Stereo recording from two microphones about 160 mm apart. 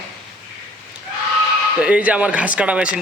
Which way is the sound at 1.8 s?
10° right (ahead or behind).